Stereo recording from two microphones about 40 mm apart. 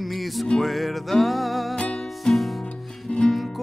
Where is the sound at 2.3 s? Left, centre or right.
Centre.